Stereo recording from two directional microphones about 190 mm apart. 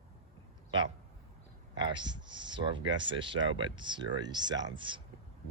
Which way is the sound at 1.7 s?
25° right (ahead or behind).